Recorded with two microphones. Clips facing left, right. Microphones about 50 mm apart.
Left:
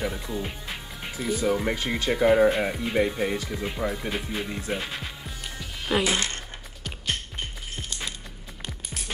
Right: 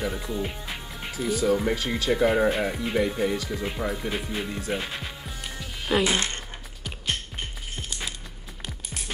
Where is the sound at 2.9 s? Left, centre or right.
Centre.